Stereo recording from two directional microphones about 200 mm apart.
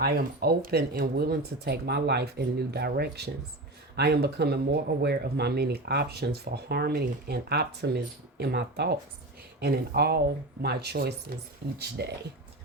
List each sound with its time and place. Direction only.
0.0 s speech: 50° right (ahead or behind)